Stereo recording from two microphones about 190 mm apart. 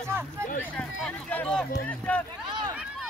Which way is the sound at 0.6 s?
5° left (ahead or behind).